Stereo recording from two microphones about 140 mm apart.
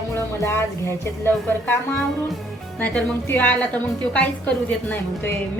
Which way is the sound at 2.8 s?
10° left (ahead or behind).